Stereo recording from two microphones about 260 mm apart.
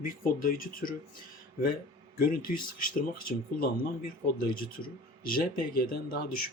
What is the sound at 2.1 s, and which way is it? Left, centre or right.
A man's voice, left.